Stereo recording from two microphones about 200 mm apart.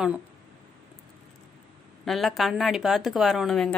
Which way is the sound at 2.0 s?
Centre (ahead or behind).